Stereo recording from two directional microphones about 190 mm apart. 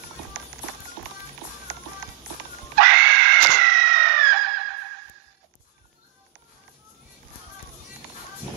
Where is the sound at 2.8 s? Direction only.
75° right (ahead or behind).